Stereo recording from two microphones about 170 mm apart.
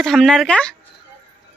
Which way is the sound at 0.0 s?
5° left (ahead or behind).